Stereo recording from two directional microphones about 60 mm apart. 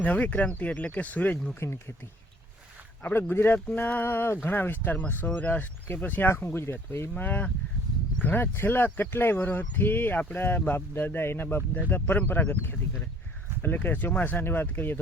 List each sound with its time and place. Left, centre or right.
0.0 s speech: left
1.5 s speech: left
3.0 s speech: left
6.3 s speech: left
7.2 s speech: left
10.8 s speech: left